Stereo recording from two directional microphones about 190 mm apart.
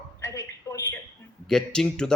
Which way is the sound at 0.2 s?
15° left (ahead or behind).